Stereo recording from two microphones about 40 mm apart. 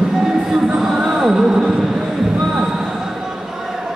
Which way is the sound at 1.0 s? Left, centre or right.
Centre.